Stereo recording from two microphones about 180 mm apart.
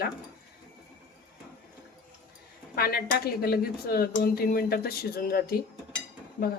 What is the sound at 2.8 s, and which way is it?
Speech, 55° left (ahead or behind).